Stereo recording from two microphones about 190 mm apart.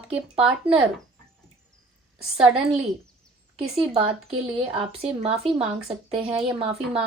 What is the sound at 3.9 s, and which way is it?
Speech, 30° right (ahead or behind).